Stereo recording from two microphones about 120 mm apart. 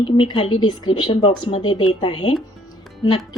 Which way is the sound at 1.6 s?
40° left (ahead or behind).